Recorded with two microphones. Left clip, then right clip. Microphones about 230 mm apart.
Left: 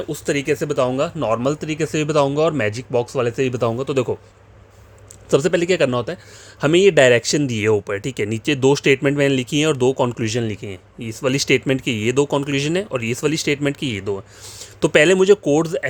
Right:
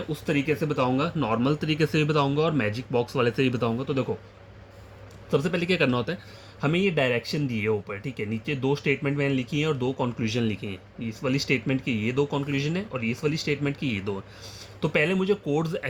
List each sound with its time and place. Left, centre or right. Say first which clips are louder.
0.1 s speech: left 5 dB; left
5.3 s speech: left 9 dB; left
6.6 s speech: left 12 dB; left
14.6 s speech: left 10 dB; left